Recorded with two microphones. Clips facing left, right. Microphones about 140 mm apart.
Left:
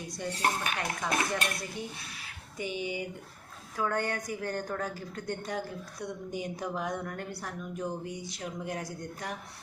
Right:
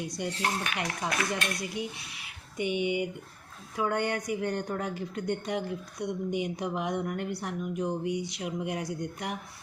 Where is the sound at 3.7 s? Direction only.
20° right (ahead or behind).